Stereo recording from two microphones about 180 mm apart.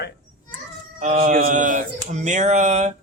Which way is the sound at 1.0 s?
45° right (ahead or behind).